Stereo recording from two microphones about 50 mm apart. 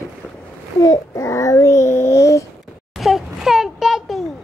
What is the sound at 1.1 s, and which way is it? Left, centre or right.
Babbling, left.